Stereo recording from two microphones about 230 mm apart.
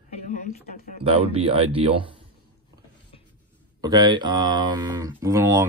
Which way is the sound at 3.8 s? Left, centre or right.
Centre.